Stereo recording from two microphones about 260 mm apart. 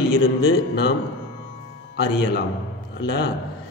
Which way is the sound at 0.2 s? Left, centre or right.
Left.